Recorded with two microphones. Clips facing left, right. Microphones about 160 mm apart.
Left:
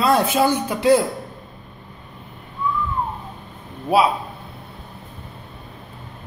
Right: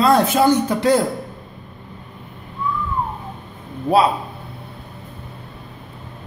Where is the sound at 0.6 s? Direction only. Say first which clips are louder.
Even; 5° left (ahead or behind).